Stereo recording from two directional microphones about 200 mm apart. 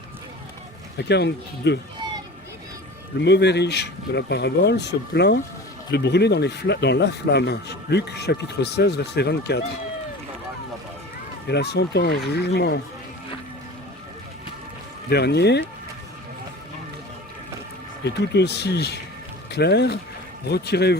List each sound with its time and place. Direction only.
0.9 s speech: 60° left (ahead or behind)
3.2 s speech: 60° left (ahead or behind)
11.4 s speech: 55° left (ahead or behind)
15.1 s speech: 55° left (ahead or behind)
18.0 s speech: 55° left (ahead or behind)